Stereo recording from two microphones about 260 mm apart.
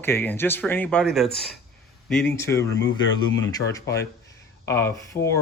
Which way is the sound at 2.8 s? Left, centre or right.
Left.